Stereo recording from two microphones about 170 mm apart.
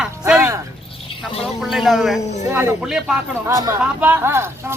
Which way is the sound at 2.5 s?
15° right (ahead or behind).